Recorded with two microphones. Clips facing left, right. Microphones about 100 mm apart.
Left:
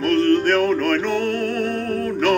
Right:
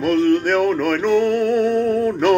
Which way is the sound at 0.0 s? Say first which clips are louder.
Right 1 dB; 10° right (ahead or behind).